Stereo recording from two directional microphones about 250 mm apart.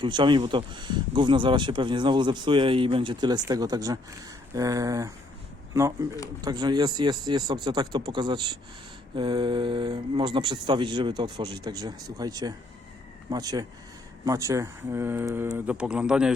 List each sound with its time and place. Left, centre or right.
0.0 s speech: centre